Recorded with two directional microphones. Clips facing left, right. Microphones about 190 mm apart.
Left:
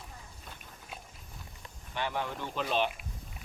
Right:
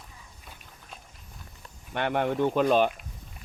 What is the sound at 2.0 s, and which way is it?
Speech, 60° right (ahead or behind).